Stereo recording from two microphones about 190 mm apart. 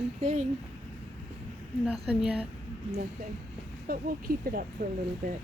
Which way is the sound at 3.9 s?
50° right (ahead or behind).